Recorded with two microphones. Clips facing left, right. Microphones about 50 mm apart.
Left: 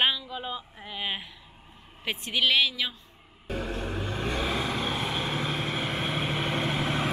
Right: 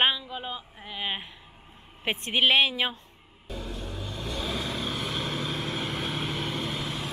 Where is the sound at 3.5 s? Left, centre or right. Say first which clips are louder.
Left 5 dB; left.